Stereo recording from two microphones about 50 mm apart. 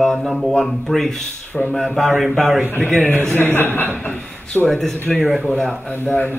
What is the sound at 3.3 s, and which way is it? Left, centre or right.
Speech, left.